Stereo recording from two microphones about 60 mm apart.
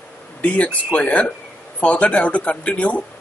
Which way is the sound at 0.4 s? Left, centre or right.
Left.